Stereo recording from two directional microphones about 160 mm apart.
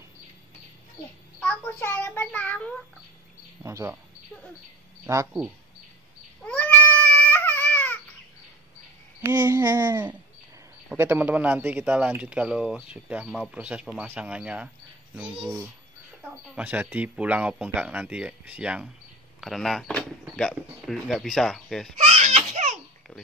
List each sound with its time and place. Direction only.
1.4 s a child's voice: 10° left (ahead or behind)
3.6 s speech: 15° right (ahead or behind)
5.0 s speech: 15° right (ahead or behind)
6.4 s cat: 10° left (ahead or behind)
9.2 s speech: 15° right (ahead or behind)
15.4 s speech: 20° right (ahead or behind)
16.5 s speech: 10° right (ahead or behind)
21.9 s a sound: 45° right (ahead or behind)